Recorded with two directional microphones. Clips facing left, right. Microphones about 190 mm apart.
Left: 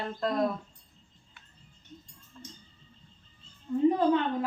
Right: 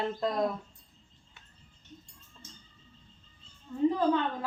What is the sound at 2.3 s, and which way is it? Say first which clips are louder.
Music: left 7 dB; 20° right (ahead or behind).